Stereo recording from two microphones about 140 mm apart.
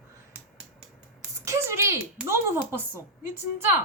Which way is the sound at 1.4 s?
20° right (ahead or behind).